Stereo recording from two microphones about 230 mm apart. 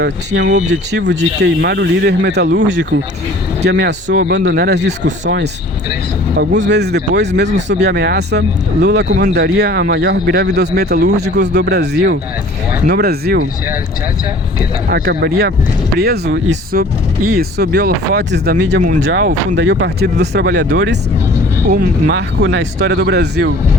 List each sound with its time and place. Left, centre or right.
0.0 s speech: right
6.6 s speech: right
14.8 s speech: right
18.8 s speech: right
19.6 s speech: right
22.1 s speech: right